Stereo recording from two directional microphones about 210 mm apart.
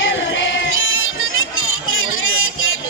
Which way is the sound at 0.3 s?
70° left (ahead or behind).